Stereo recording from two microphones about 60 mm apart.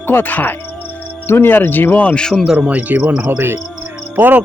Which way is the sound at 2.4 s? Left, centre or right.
Centre.